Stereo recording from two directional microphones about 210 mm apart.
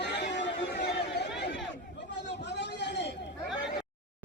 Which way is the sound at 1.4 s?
55° left (ahead or behind).